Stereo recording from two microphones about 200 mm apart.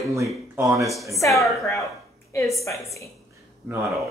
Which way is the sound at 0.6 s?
15° right (ahead or behind).